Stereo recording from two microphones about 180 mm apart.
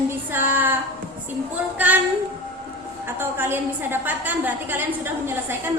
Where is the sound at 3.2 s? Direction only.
10° right (ahead or behind).